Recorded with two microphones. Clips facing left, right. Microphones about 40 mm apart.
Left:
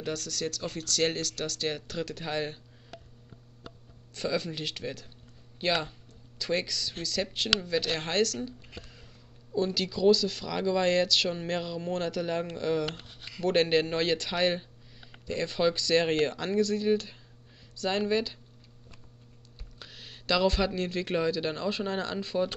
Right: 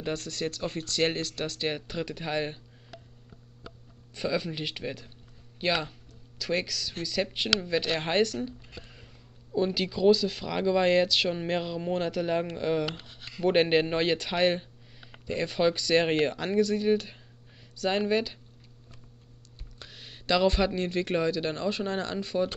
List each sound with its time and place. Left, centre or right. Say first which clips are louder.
0.0 s speech: right 1 dB; right; by 2.6 s centre
4.1 s speech: right 1 dB; centre
19.8 s speech: even; centre